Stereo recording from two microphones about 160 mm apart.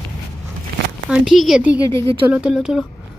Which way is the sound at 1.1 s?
Centre (ahead or behind).